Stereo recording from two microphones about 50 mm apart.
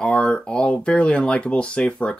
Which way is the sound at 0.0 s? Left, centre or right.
Centre.